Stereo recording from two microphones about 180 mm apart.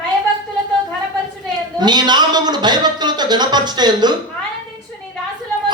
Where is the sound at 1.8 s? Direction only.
25° right (ahead or behind).